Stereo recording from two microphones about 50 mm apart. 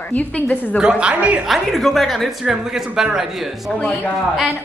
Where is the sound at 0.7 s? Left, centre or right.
Centre.